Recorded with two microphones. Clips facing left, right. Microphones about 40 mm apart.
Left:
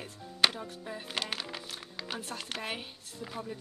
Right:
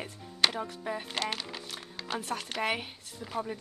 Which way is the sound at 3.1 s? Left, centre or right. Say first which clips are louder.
Right 5 dB; centre.